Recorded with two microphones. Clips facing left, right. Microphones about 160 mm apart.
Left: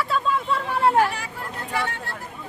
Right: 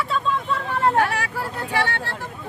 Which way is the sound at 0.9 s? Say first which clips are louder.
Even; 70° right (ahead or behind).